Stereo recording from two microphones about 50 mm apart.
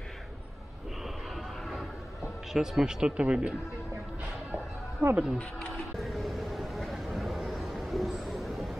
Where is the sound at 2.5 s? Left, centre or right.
Centre.